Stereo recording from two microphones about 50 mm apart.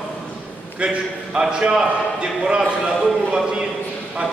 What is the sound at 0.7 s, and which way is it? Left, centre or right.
A man's voice, centre.